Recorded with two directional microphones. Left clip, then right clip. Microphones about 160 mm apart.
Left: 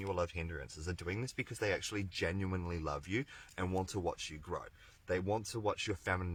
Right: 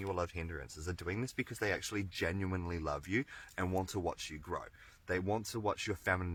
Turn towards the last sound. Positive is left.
turn(degrees=-40)  # may be behind; listen again after turning